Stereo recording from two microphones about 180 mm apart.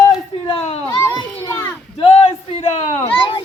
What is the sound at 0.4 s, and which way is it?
Children playing, 35° left (ahead or behind).